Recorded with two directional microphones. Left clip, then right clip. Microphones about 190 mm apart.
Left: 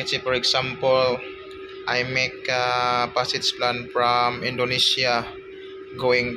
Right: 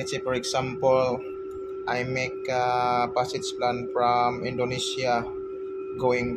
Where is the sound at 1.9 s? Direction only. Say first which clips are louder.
Left 5 dB; 5° right (ahead or behind).